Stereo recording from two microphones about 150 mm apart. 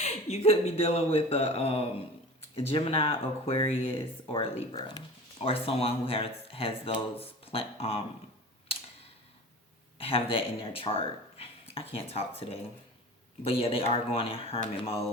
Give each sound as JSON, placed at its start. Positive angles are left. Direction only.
{"t": 0.0, "sound": "speech", "side_deg": 45}
{"t": 4.8, "sound": "speech", "side_deg": 25}
{"t": 5.4, "sound": "speech", "side_deg": 40}
{"t": 10.0, "sound": "speech", "side_deg": 40}
{"t": 13.4, "sound": "speech", "side_deg": 40}